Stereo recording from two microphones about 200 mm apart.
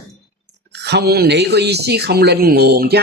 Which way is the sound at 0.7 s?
55° right (ahead or behind).